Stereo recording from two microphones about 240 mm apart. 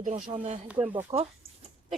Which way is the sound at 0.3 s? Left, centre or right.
Centre.